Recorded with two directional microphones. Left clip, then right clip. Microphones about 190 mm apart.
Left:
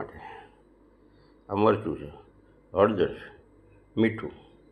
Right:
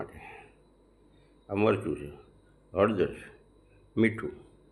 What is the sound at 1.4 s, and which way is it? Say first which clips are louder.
Speech: left 3 dB; 15° right (ahead or behind).